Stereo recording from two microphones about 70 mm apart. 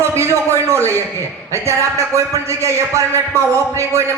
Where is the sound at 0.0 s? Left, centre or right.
Right.